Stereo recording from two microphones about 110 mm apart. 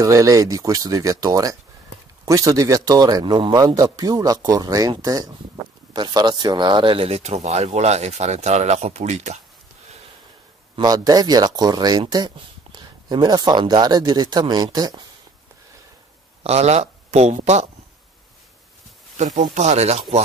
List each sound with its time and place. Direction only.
0.0 s speech: 30° right (ahead or behind); by 9.4 s 90° right
10.8 s speech: 35° right (ahead or behind)
16.4 s speech: 75° right (ahead or behind)
19.1 s speech: 90° right